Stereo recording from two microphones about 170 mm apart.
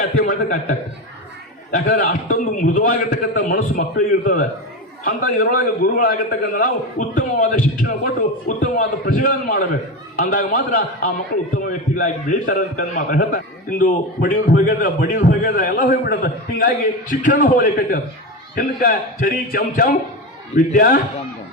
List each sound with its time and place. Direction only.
0.0 s a man's voice: 55° left (ahead or behind)